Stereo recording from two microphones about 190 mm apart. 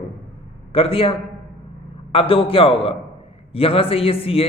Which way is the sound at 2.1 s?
30° left (ahead or behind).